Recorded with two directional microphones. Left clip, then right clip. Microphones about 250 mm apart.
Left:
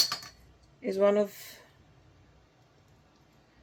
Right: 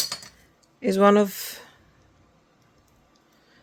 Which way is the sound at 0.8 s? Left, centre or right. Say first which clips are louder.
Right 7 dB; right.